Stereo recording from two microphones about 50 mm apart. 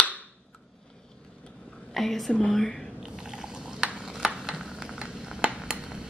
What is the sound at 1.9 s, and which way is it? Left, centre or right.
Speech, centre.